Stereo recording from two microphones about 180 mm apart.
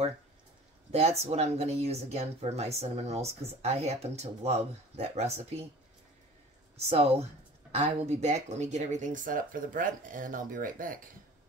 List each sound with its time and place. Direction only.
0.9 s speech: 35° right (ahead or behind)
6.9 s speech: 35° right (ahead or behind)